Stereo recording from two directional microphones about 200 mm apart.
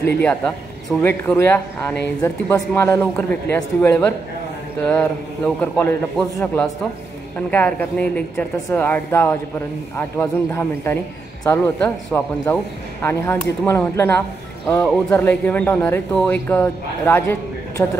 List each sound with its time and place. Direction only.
0.0 s a man's voice: 5° left (ahead or behind)